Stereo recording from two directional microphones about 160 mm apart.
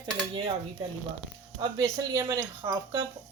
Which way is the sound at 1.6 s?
25° right (ahead or behind).